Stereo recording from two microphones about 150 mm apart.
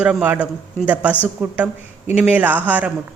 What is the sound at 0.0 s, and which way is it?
Speech, 10° right (ahead or behind).